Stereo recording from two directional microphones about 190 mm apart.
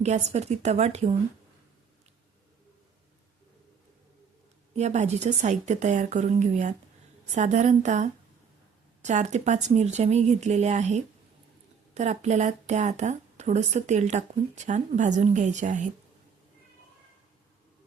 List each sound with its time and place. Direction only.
0.0 s speech: 35° right (ahead or behind)
4.8 s speech: 35° right (ahead or behind)